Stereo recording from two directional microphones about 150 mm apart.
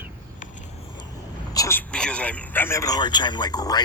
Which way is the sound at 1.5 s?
20° left (ahead or behind).